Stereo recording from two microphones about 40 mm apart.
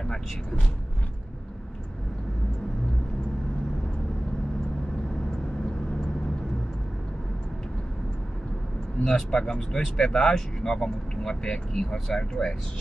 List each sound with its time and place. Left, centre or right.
9.0 s speech: centre